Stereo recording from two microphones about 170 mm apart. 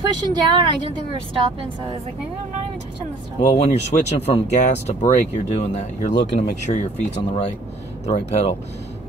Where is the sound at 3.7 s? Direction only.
40° left (ahead or behind).